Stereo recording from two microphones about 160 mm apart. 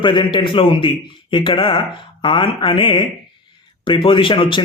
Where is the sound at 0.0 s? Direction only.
30° left (ahead or behind).